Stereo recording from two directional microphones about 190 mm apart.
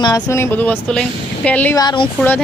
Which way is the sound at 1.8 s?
25° left (ahead or behind).